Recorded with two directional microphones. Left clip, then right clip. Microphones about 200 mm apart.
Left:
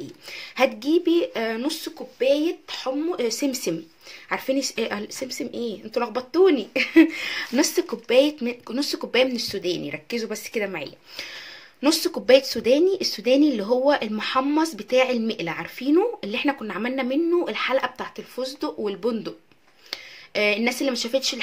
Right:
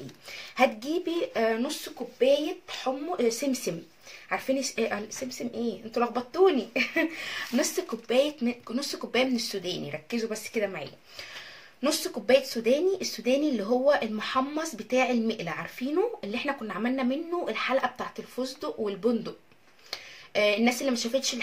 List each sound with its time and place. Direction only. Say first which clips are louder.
0.3 s speech: left 3 dB; 40° left (ahead or behind)